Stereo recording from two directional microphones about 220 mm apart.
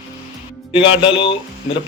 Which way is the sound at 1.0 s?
25° left (ahead or behind).